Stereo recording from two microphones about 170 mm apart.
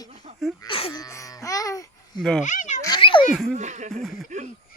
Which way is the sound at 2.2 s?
Centre (ahead or behind).